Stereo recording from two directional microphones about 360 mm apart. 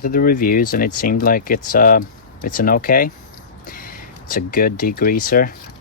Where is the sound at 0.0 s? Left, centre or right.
Left.